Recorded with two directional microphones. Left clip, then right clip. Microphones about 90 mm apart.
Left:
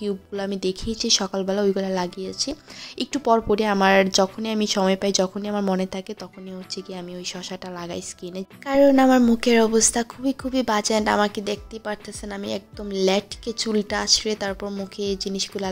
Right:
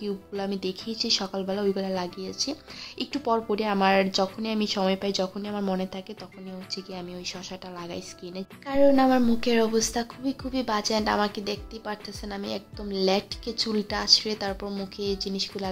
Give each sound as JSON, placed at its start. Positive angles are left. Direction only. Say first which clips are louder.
{"t": 0.0, "sound": "speech", "louder": "left 4 dB", "side_deg": 45}
{"t": 3.0, "sound": "a woman's voice", "louder": "left 6 dB", "side_deg": 55}
{"t": 6.7, "sound": "a woman's voice", "louder": "left 2 dB", "side_deg": 45}
{"t": 15.0, "sound": "speech", "louder": "left 3 dB", "side_deg": 55}